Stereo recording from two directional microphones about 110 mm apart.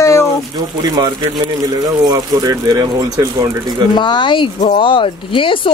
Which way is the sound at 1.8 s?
35° right (ahead or behind).